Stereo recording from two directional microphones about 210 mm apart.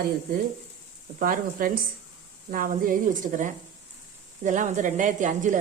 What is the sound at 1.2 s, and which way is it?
A woman's voice, 40° right (ahead or behind).